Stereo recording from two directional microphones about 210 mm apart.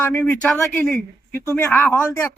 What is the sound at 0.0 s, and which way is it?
Speech, 10° left (ahead or behind).